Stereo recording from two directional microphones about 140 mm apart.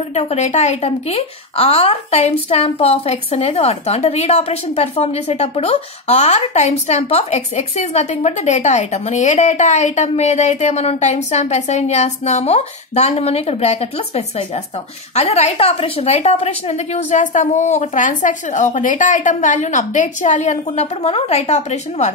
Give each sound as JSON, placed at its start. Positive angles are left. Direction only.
{"t": 0.1, "sound": "a woman's voice", "side_deg": 50}